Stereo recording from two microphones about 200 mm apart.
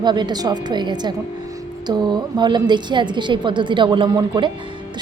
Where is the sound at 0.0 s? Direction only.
20° right (ahead or behind).